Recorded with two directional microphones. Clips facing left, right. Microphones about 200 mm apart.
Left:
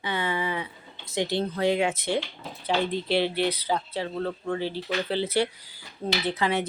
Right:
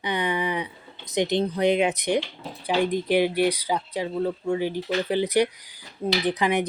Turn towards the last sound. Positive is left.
turn(degrees=-15)  # may be behind; listen again after turning